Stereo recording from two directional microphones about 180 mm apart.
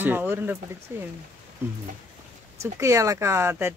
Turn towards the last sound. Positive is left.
turn(degrees=-15)  # may be behind; listen again after turning